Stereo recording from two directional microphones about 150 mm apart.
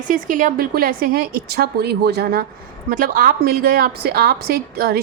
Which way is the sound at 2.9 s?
70° right (ahead or behind).